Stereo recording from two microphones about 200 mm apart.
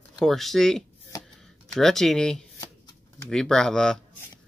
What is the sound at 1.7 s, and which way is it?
Speech, centre (ahead or behind).